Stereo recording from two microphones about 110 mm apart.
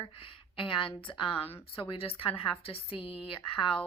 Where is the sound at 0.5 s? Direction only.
50° left (ahead or behind).